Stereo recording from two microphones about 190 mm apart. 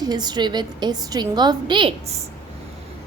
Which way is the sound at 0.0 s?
20° right (ahead or behind).